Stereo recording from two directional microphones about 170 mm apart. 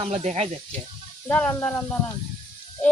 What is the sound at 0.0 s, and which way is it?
Speech, 40° right (ahead or behind).